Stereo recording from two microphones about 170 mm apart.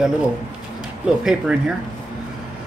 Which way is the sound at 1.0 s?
5° right (ahead or behind).